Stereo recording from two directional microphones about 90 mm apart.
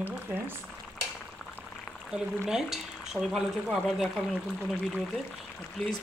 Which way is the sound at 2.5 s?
5° right (ahead or behind).